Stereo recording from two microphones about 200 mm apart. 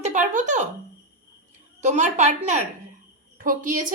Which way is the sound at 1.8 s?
35° right (ahead or behind).